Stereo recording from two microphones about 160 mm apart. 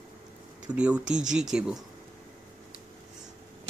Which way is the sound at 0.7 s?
5° right (ahead or behind).